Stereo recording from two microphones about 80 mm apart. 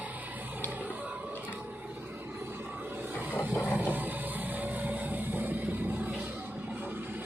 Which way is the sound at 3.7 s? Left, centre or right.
Right.